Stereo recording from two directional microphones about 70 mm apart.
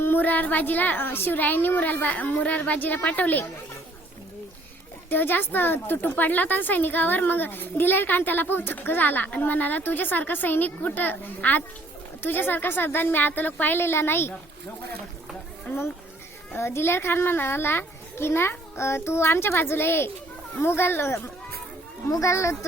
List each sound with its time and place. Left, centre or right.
0.0 s speech: left
5.0 s a child's voice: left
15.7 s speech: left
16.6 s a child's voice: left
22.2 s speech: left